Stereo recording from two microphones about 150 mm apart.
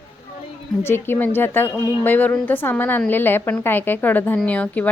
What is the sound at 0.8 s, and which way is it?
Speech, 15° left (ahead or behind).